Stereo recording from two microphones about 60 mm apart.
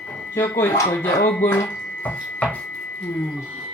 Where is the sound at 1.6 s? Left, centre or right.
Left.